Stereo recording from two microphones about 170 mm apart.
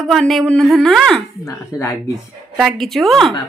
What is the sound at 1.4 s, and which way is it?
Speech, 20° left (ahead or behind).